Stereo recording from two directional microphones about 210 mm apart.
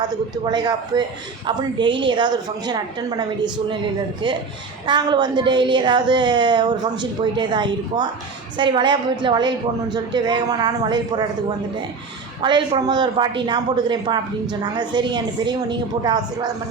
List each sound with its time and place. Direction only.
0.0 s a woman's voice: 20° right (ahead or behind)
4.9 s a woman's voice: 20° right (ahead or behind)
12.4 s a woman's voice: 20° right (ahead or behind)